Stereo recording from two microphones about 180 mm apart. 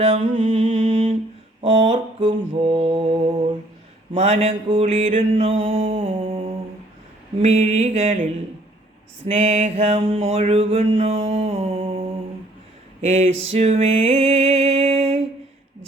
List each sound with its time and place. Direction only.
0.0 s mantra: 35° right (ahead or behind)
9.2 s mantra: 35° right (ahead or behind)
13.5 s a sound: 30° right (ahead or behind)